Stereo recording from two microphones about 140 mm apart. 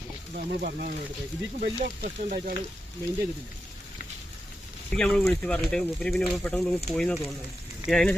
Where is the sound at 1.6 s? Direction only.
65° right (ahead or behind).